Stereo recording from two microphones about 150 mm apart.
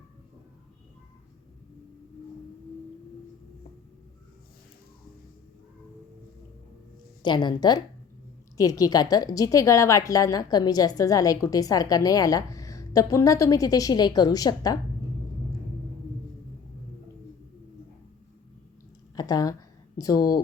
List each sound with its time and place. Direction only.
7.2 s a woman's voice: 30° left (ahead or behind)
19.1 s a sound: 25° left (ahead or behind)
20.0 s a woman's voice: 25° left (ahead or behind)